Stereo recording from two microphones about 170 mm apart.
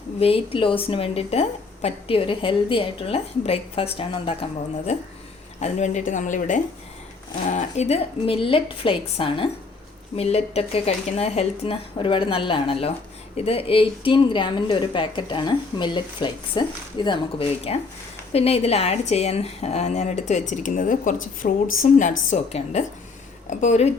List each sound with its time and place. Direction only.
0.2 s a woman's voice: 35° left (ahead or behind)